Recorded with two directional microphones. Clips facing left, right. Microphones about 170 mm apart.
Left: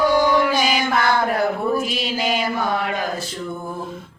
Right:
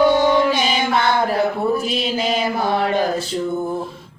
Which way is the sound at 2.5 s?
35° right (ahead or behind).